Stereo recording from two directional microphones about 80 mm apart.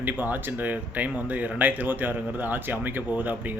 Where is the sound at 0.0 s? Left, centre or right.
Right.